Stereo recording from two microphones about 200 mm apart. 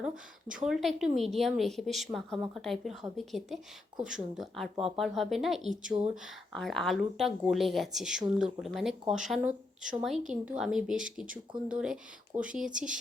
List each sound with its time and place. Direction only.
0.4 s speech: 40° right (ahead or behind)
0.7 s a woman's voice: centre (ahead or behind)